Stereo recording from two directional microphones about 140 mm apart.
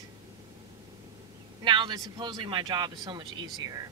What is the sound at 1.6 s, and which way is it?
Speech, 35° right (ahead or behind).